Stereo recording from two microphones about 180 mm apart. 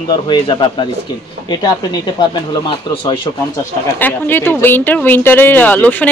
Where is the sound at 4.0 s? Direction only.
10° left (ahead or behind).